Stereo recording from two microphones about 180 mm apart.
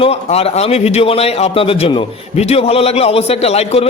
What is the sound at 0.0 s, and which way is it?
A man's voice, 35° left (ahead or behind).